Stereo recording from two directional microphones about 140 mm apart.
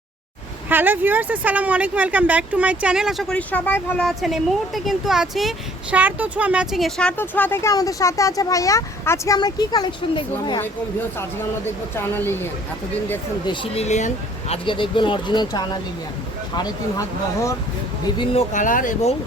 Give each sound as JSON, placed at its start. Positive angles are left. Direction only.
{"t": 0.7, "sound": "speech", "side_deg": -15}
{"t": 4.2, "sound": "a woman's voice", "side_deg": 0}
{"t": 7.2, "sound": "speech", "side_deg": 15}
{"t": 11.2, "sound": "speech", "side_deg": 15}
{"t": 13.5, "sound": "speech", "side_deg": 35}
{"t": 13.8, "sound": "speech", "side_deg": 55}
{"t": 18.5, "sound": "speech", "side_deg": 70}